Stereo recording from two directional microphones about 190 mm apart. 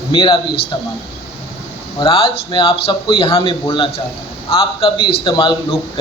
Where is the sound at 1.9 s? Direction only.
30° left (ahead or behind).